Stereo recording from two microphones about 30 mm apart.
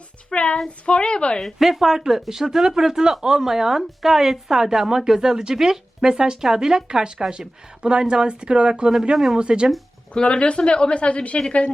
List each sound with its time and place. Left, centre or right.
0.3 s a woman's voice: left
1.5 s a woman's voice: centre; by 5.5 s right
5.5 s a woman's voice: centre
6.0 s speech: right
10.2 s a woman's voice: left